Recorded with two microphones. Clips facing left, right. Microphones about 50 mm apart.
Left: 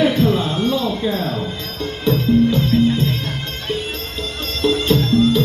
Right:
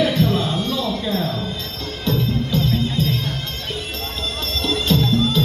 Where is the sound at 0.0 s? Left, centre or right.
Left.